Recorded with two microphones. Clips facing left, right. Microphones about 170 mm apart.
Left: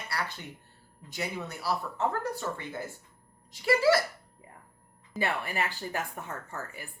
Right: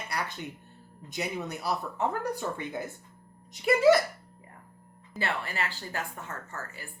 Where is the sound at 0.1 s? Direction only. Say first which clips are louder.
Right 1 dB; 20° right (ahead or behind).